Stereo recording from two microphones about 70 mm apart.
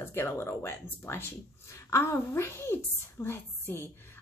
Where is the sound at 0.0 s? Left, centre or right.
Left.